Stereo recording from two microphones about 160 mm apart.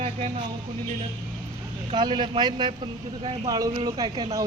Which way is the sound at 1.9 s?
30° right (ahead or behind).